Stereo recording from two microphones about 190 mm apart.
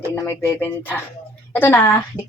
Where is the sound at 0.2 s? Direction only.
15° left (ahead or behind).